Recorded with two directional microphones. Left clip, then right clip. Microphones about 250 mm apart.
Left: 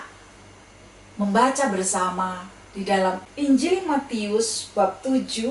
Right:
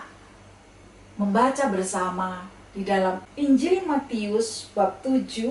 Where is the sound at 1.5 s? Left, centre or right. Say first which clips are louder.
Left 1 dB; centre.